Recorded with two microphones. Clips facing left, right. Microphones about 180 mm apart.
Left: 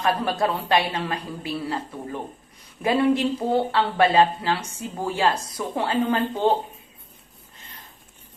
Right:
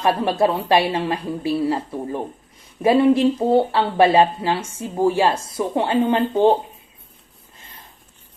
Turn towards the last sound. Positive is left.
turn(degrees=-30)  # may be behind; listen again after turning